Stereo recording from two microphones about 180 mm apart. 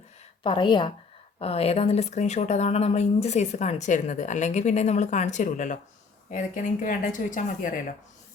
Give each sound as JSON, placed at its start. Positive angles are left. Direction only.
{"t": 0.4, "sound": "a woman's voice", "side_deg": 25}